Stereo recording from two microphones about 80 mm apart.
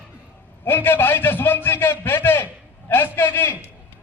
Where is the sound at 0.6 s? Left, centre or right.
Left.